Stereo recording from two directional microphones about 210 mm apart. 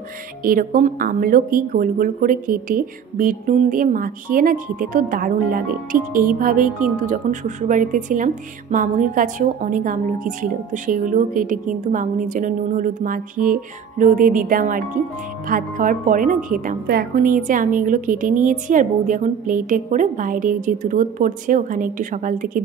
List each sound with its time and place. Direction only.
0.4 s a woman's voice: 40° right (ahead or behind)